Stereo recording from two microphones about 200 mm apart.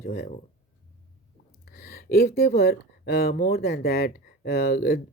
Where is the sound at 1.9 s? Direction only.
50° left (ahead or behind).